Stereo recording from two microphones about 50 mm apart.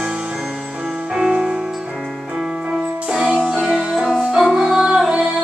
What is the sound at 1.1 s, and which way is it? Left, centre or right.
Music, centre.